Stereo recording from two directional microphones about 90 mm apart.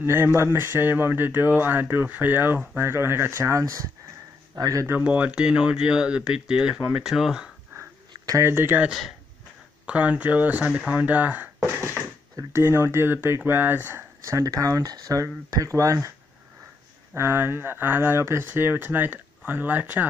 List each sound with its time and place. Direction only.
0.0 s speech: 25° right (ahead or behind); by 4.8 s 40° right (ahead or behind)
5.0 s speech: 15° right (ahead or behind)
8.4 s speech: 25° right (ahead or behind)
8.8 s speech: centre (ahead or behind)
9.8 s speech: 15° right (ahead or behind)
12.4 s speech: 30° right (ahead or behind)
14.2 s speech: 40° right (ahead or behind)
17.1 s speech: 30° right (ahead or behind)